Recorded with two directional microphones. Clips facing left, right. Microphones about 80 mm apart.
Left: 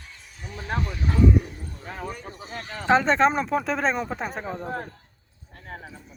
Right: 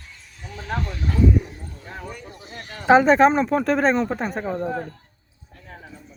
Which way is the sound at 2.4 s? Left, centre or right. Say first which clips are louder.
Left 2 dB; left.